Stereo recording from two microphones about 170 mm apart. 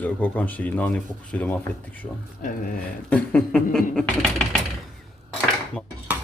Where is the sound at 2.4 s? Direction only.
50° left (ahead or behind).